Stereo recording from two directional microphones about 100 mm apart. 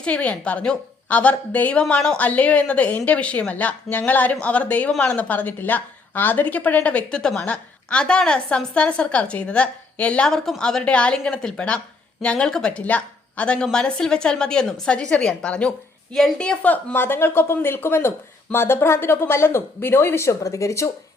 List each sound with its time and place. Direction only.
0.0 s a woman's voice: 10° left (ahead or behind); by 20.9 s 30° left (ahead or behind)